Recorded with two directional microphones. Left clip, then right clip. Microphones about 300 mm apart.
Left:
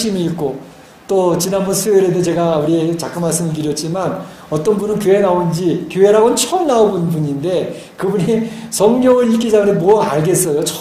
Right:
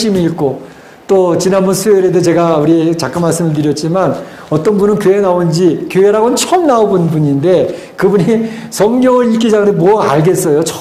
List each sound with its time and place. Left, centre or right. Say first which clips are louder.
0.0 s a man's voice: right 6 dB; right